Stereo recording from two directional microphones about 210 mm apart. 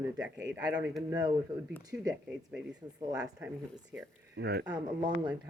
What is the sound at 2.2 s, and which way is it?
Speech, 5° right (ahead or behind).